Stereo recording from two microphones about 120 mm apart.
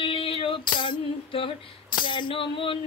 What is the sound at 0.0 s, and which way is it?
Music, 50° left (ahead or behind).